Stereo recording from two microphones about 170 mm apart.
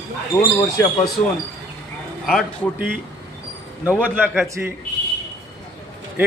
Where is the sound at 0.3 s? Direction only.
20° left (ahead or behind).